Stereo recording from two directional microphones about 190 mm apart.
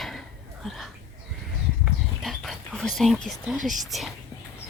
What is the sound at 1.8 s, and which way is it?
Whispering, centre (ahead or behind).